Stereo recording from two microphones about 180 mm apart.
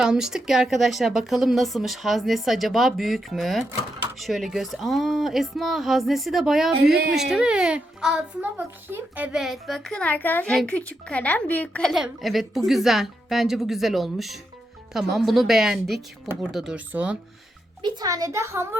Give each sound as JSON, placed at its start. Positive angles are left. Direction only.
{"t": 0.0, "sound": "a child's voice", "side_deg": -5}
{"t": 6.7, "sound": "speech", "side_deg": -60}
{"t": 7.1, "sound": "a child's voice", "side_deg": 0}
{"t": 17.8, "sound": "a woman's voice", "side_deg": -20}